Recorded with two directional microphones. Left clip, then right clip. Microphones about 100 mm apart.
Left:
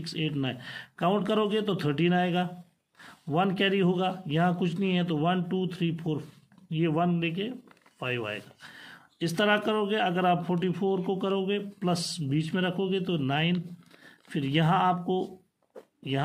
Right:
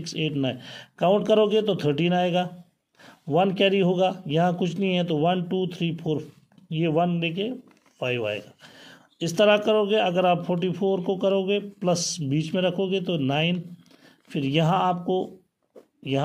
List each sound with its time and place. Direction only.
0.0 s a man's voice: 35° right (ahead or behind)